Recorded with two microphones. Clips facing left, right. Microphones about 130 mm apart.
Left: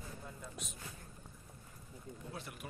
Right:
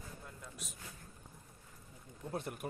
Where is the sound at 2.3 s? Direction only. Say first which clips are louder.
Right 10 dB; 50° right (ahead or behind).